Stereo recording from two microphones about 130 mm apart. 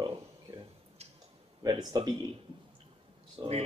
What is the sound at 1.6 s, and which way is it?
Speech, 30° right (ahead or behind).